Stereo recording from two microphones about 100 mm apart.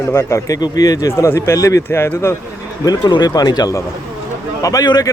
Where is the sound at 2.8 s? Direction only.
45° left (ahead or behind).